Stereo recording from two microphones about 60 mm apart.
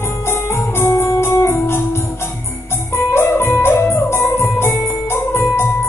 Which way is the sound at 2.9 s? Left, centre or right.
Left.